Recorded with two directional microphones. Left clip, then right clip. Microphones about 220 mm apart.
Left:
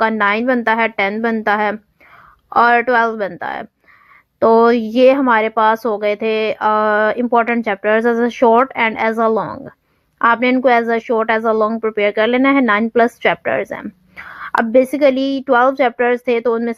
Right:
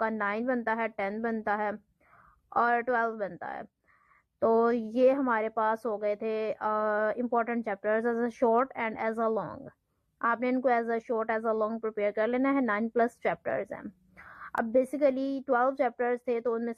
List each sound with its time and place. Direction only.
0.0 s a woman's voice: 30° left (ahead or behind)